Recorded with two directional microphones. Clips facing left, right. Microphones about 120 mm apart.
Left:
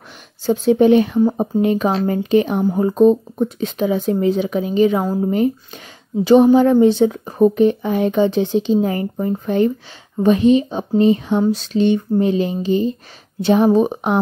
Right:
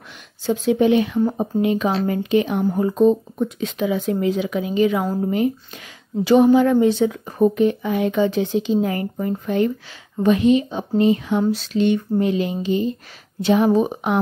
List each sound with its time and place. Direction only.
0.5 s speech: 35° left (ahead or behind)